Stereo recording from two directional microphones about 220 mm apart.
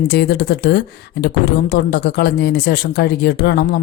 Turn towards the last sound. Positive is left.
turn(degrees=50)  # may be behind; listen again after turning